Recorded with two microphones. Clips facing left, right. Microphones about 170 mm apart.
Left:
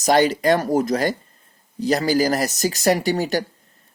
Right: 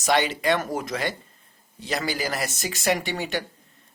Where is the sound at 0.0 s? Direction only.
40° left (ahead or behind).